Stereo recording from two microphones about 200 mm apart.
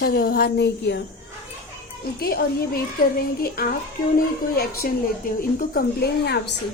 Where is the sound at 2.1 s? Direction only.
50° left (ahead or behind).